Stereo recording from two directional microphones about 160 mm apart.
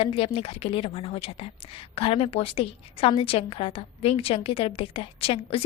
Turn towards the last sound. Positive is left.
turn(degrees=35)  # may be behind; listen again after turning